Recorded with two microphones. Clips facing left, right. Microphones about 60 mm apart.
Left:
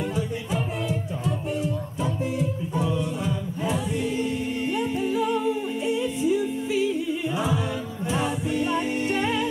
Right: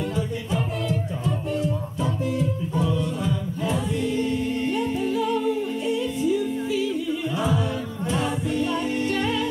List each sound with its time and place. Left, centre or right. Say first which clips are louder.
0.1 s music: right 1 dB; centre
7.3 s a capella: right 3 dB; centre
8.1 s music: even; centre